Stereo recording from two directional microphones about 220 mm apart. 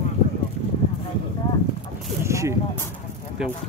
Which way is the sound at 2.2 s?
15° right (ahead or behind).